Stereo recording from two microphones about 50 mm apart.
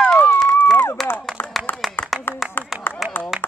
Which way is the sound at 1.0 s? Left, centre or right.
Centre.